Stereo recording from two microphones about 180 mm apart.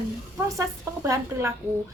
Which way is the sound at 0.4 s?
20° right (ahead or behind).